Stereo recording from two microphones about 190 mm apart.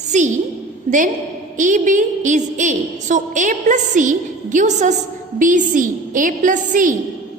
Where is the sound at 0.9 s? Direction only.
40° right (ahead or behind).